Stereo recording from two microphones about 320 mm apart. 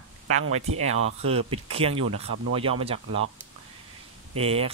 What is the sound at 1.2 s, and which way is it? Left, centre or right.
Speech, centre.